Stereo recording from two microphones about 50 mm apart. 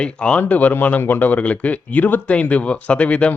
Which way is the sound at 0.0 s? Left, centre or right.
Left.